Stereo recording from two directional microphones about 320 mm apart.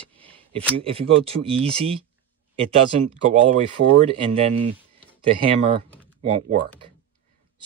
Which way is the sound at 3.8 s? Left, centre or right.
Centre.